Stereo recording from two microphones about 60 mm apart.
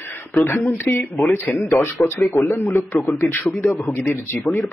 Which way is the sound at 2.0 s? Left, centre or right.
Left.